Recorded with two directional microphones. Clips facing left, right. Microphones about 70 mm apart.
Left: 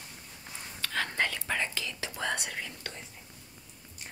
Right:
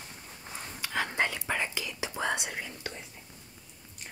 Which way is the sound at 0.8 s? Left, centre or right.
Centre.